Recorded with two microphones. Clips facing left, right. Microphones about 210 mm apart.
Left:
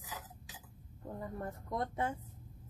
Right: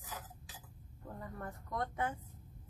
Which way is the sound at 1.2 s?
25° left (ahead or behind).